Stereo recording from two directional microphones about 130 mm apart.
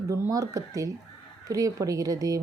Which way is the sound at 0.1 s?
25° right (ahead or behind).